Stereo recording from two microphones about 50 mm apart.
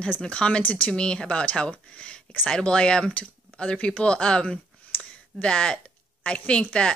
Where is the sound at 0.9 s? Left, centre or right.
Centre.